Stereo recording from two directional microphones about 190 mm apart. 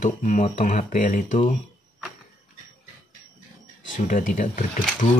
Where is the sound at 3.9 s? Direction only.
45° left (ahead or behind).